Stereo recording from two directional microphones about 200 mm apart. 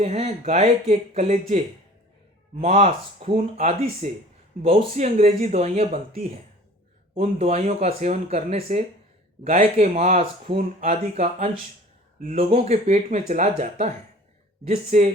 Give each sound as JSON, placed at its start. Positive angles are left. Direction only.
{"t": 0.0, "sound": "speech", "side_deg": -30}
{"t": 7.1, "sound": "speech", "side_deg": -30}